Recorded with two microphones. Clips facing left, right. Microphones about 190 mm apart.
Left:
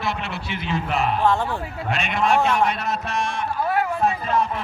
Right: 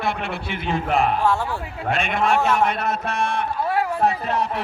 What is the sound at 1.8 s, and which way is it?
A man's voice, 50° right (ahead or behind).